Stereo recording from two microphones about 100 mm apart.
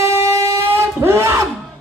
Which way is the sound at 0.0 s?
30° right (ahead or behind).